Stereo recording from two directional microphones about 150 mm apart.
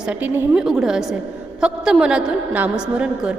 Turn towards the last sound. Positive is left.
turn(degrees=-5)  # may be behind; listen again after turning